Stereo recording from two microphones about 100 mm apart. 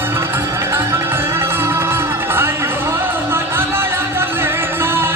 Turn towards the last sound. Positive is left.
turn(degrees=-25)  # may be behind; listen again after turning